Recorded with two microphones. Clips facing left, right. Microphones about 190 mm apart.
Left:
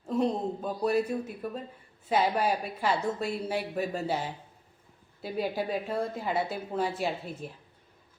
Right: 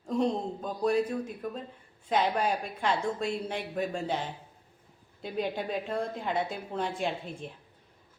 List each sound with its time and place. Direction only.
0.0 s a woman's voice: 5° left (ahead or behind)